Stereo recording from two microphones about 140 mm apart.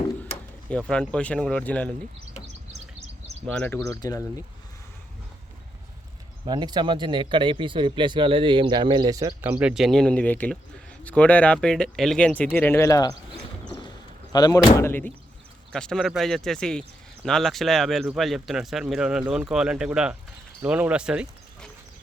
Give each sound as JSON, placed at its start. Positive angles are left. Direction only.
{"t": 0.7, "sound": "speech", "side_deg": 5}
{"t": 3.4, "sound": "speech", "side_deg": 5}
{"t": 3.8, "sound": "speech", "side_deg": 20}
{"t": 6.4, "sound": "speech", "side_deg": -30}
{"t": 9.4, "sound": "speech", "side_deg": -10}
{"t": 14.3, "sound": "speech", "side_deg": 30}
{"t": 15.7, "sound": "speech", "side_deg": 5}